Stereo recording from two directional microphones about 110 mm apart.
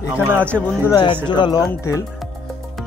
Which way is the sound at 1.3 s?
40° left (ahead or behind).